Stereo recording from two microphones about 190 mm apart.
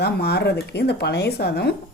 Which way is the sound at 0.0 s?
60° left (ahead or behind).